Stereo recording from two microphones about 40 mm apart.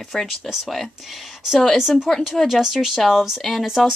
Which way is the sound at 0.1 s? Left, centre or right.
Centre.